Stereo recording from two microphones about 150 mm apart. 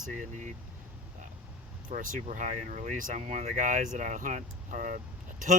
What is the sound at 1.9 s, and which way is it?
Speech, 60° right (ahead or behind).